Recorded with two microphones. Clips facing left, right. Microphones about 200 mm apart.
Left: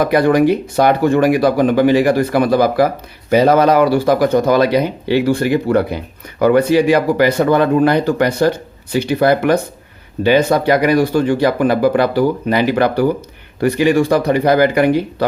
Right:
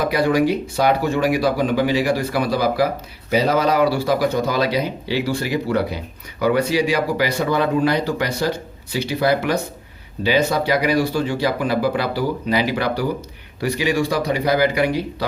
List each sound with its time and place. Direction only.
0.0 s speech: 55° left (ahead or behind)